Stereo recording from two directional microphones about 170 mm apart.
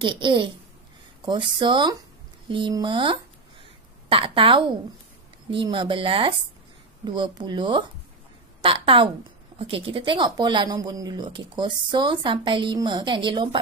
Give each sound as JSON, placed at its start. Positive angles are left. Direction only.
{"t": 0.0, "sound": "a woman's voice", "side_deg": -30}